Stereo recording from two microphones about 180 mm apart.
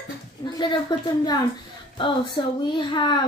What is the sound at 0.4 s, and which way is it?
Speech, 25° left (ahead or behind).